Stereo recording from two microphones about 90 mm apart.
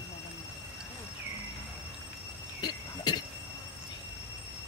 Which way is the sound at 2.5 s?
55° left (ahead or behind).